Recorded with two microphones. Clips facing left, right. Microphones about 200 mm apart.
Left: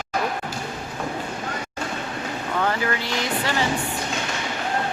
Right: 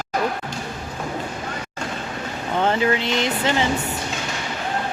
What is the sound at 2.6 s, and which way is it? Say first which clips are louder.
A woman's voice: right 5 dB; 20° right (ahead or behind).